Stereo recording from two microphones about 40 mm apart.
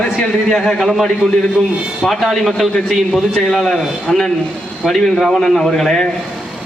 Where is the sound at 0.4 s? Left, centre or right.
Centre.